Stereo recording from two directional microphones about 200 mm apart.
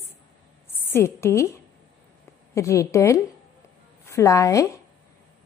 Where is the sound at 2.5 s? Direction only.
15° left (ahead or behind).